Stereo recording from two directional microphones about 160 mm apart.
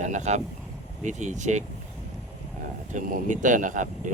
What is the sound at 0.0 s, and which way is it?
Speech, 50° right (ahead or behind).